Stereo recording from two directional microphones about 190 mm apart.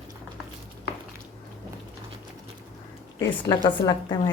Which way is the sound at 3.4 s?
20° left (ahead or behind).